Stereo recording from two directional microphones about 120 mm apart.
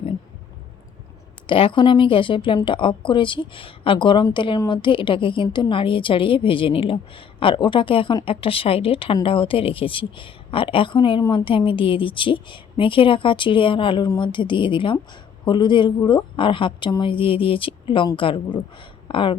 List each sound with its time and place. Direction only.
1.5 s a woman's voice: 45° left (ahead or behind)